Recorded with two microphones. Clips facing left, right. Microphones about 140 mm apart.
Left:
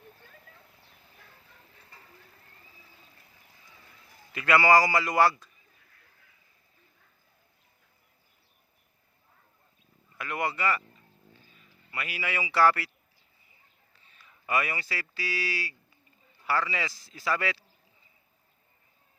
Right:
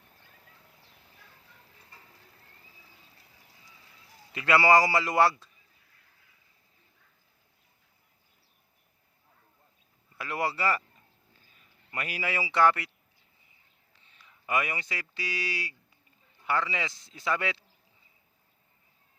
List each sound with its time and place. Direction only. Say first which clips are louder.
4.3 s a man's voice: even; 25° right (ahead or behind)
10.2 s a sound: even; 30° right (ahead or behind)
12.5 s a man's voice: left 1 dB; 20° right (ahead or behind)
14.1 s a man's voice: even; 20° right (ahead or behind)